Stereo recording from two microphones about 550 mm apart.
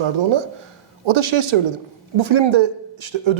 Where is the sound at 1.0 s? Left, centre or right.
Right.